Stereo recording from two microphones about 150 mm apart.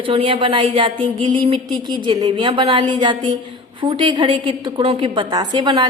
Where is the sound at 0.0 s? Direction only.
35° right (ahead or behind).